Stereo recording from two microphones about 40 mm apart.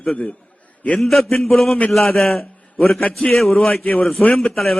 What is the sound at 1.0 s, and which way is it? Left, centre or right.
A man's voice, centre.